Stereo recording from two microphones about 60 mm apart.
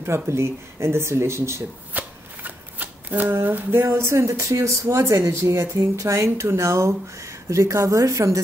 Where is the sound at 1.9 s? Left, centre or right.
Right.